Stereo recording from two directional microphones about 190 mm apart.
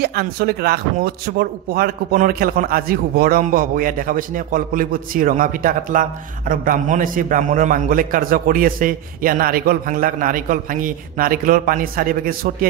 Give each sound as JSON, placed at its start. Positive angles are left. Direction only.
{"t": 0.0, "sound": "a man's voice", "side_deg": -55}